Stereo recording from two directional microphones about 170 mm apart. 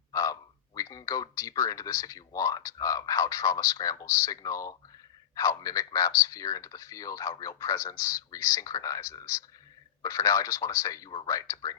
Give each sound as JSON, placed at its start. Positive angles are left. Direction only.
{"t": 0.1, "sound": "speech", "side_deg": 20}